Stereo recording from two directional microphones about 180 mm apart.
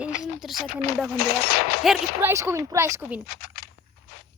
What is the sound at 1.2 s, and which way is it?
Speech, 60° left (ahead or behind).